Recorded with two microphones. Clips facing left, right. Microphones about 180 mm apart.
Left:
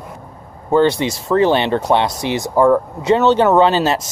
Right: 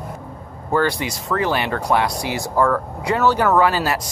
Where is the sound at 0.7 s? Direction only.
25° left (ahead or behind).